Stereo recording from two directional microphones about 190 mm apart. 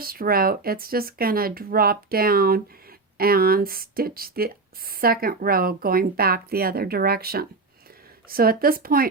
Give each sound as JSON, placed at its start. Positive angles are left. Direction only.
{"t": 0.0, "sound": "speech", "side_deg": -50}